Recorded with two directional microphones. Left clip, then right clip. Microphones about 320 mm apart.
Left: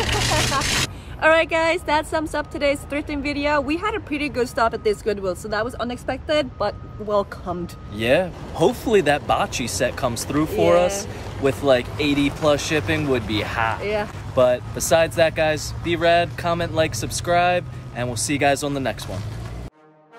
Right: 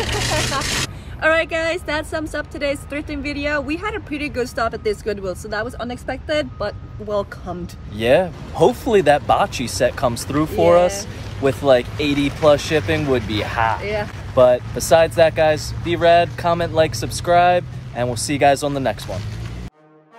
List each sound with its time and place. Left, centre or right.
0.0 s a sound: centre
1.2 s speech: centre
7.9 s speech: centre